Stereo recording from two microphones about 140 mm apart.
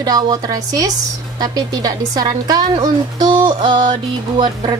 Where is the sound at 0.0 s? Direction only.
25° right (ahead or behind).